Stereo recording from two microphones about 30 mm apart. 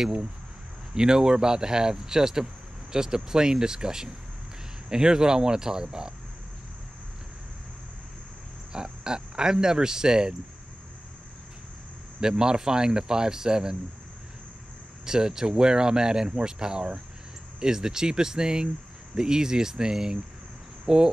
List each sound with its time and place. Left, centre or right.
0.0 s speech: right
8.7 s speech: right
12.2 s speech: right
15.0 s speech: right
20.8 s cricket: right